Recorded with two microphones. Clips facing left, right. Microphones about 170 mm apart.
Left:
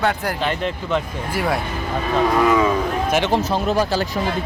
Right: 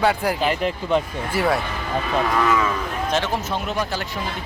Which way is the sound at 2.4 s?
15° left (ahead or behind).